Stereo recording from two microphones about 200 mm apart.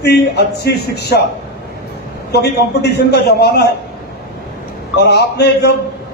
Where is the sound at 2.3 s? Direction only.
55° left (ahead or behind).